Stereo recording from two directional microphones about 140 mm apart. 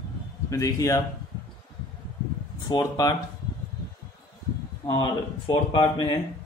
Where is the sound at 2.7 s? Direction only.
25° left (ahead or behind).